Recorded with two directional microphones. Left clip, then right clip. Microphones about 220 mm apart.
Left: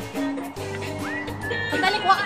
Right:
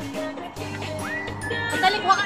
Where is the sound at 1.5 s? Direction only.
5° left (ahead or behind).